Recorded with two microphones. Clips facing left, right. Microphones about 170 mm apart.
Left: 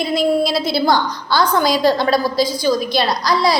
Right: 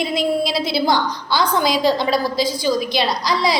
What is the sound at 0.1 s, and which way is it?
Speech, 40° left (ahead or behind).